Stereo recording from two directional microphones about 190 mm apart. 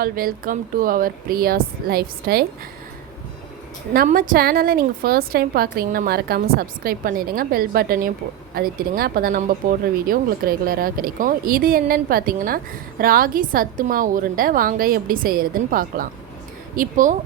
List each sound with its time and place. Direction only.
0.0 s a woman's voice: 50° right (ahead or behind)
3.9 s a woman's voice: 50° right (ahead or behind)